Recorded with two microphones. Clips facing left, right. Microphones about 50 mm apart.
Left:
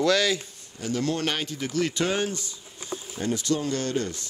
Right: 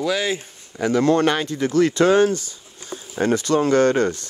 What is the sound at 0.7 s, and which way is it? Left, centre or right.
Speech, right.